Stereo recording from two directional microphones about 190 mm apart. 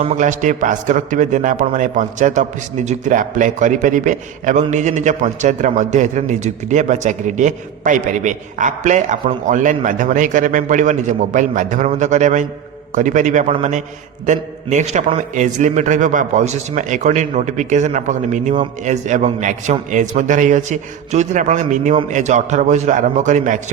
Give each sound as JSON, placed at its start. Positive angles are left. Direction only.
{"t": 0.0, "sound": "a man's voice", "side_deg": -40}